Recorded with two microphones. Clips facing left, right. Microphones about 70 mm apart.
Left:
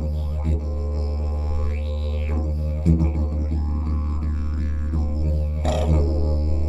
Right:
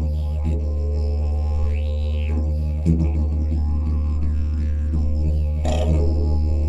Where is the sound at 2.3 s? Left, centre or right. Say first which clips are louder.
Right 1 dB; left.